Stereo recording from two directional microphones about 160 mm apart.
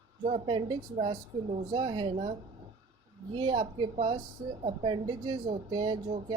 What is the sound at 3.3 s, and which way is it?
Speech, 30° right (ahead or behind).